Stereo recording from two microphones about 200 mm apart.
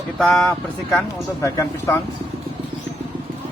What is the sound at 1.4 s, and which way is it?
Speech, 15° left (ahead or behind).